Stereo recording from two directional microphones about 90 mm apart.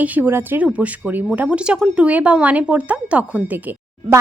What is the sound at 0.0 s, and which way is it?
A woman's voice, 20° right (ahead or behind).